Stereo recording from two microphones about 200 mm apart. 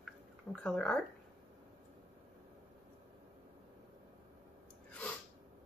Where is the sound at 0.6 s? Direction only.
5° left (ahead or behind).